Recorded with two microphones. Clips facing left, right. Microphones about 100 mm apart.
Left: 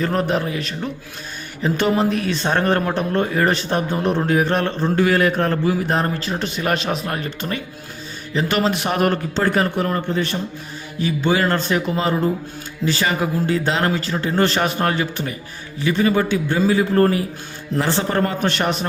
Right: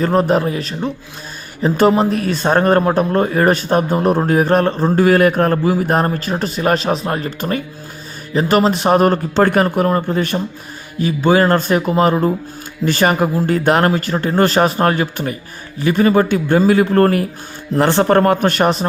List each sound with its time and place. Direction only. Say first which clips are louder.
0.0 s speech: right 6 dB; 40° right (ahead or behind)
9.3 s a man's voice: right 5 dB; 55° right (ahead or behind)